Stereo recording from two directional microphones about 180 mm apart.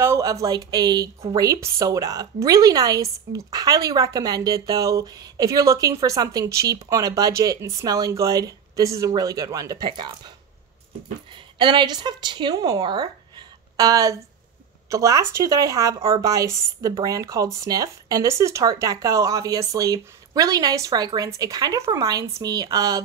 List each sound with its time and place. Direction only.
0.0 s a woman's voice: 15° right (ahead or behind)
11.3 s a woman's voice: 25° right (ahead or behind)